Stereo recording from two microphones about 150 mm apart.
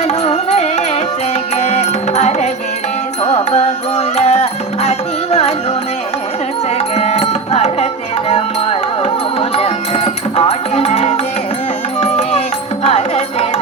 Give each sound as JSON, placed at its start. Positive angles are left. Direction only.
{"t": 0.1, "sound": "music", "side_deg": 45}
{"t": 6.7, "sound": "music", "side_deg": 45}